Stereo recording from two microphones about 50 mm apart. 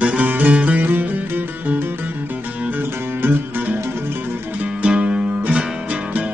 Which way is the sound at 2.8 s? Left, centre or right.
Right.